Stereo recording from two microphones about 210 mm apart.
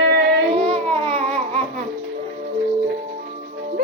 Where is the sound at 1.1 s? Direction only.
25° right (ahead or behind).